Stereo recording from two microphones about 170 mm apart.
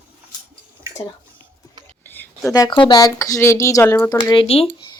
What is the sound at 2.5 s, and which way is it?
Speech, 25° left (ahead or behind).